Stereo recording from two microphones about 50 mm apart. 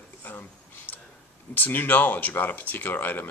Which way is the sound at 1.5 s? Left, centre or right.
Left.